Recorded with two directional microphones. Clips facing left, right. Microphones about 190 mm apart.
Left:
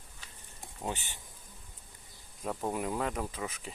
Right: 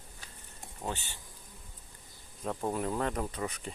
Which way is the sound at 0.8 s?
15° left (ahead or behind).